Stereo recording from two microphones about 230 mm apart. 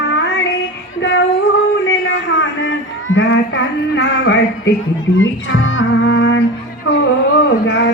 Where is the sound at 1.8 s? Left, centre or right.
Left.